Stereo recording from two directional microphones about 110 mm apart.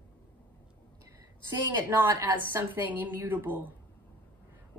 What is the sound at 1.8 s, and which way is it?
A woman's voice, 20° right (ahead or behind).